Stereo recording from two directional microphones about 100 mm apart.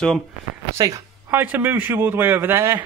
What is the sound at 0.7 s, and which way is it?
Speech, 35° right (ahead or behind).